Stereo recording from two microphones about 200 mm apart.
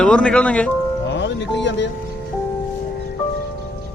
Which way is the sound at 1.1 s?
60° left (ahead or behind).